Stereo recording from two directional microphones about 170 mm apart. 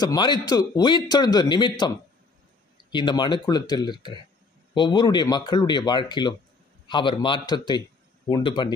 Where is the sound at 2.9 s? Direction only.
25° left (ahead or behind).